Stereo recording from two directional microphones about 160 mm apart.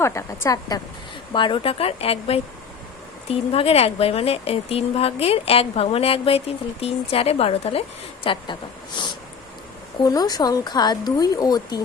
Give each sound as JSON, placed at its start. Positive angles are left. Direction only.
{"t": 0.0, "sound": "speech", "side_deg": 15}
{"t": 1.3, "sound": "a woman's voice", "side_deg": 30}
{"t": 9.0, "sound": "a sound", "side_deg": 30}
{"t": 10.0, "sound": "speech", "side_deg": 25}